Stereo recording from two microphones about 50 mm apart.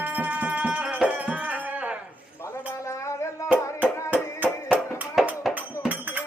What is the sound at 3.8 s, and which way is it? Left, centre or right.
Music, right.